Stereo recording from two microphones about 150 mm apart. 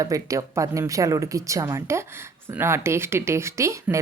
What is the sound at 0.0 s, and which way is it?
Speech, 20° right (ahead or behind).